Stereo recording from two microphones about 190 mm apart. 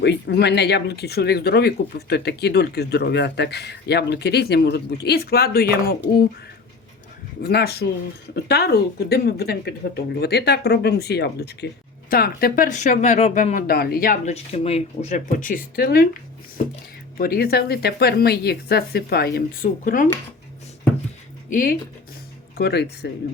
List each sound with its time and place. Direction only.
0.0 s speech: 60° left (ahead or behind)
7.4 s speech: 60° left (ahead or behind)
21.5 s speech: 45° left (ahead or behind)
22.5 s speech: 60° left (ahead or behind)